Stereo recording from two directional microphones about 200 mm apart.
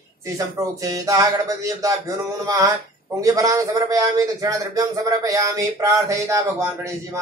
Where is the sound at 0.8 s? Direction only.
15° right (ahead or behind).